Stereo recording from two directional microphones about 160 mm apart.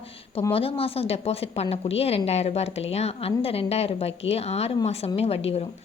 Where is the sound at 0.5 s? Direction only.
35° left (ahead or behind).